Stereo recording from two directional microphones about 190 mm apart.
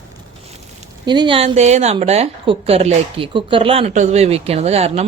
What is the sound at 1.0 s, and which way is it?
A woman's voice, 25° right (ahead or behind).